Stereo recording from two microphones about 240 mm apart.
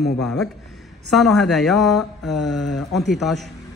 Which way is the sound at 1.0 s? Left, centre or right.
Centre.